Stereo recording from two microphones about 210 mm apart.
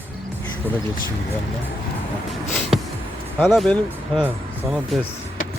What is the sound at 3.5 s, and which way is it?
Music, centre (ahead or behind).